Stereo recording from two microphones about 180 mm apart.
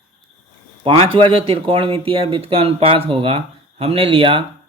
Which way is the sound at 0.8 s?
30° right (ahead or behind).